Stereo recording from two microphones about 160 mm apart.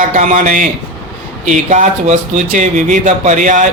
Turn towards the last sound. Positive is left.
turn(degrees=-55)  # may be behind; listen again after turning